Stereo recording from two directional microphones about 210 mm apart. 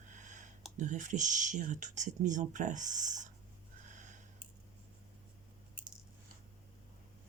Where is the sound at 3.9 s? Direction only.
35° right (ahead or behind).